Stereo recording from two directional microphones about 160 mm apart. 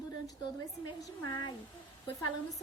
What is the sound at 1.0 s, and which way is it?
Speech, 25° left (ahead or behind).